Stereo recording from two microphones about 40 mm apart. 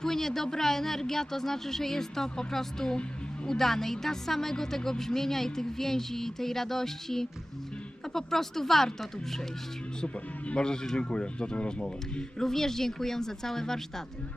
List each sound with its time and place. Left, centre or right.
0.0 s speech: centre
10.5 s speech: left
12.4 s speech: centre